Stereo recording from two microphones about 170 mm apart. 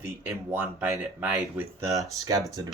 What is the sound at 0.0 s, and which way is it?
Speech, 10° right (ahead or behind).